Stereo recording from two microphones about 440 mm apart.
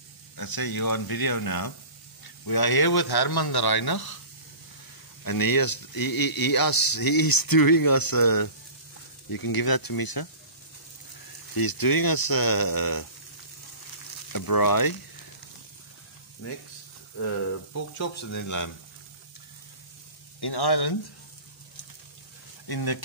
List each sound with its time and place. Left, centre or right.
0.4 s speech: left
5.2 s speech: left
11.5 s speech: left
14.3 s speech: left
17.9 s speech: left
20.3 s speech: left
22.7 s speech: left